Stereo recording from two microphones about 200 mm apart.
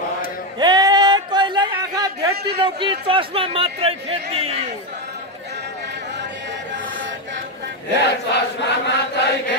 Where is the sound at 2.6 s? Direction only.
25° right (ahead or behind).